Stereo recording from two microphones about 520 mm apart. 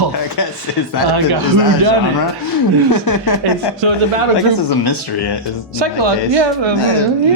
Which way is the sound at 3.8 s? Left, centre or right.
Right.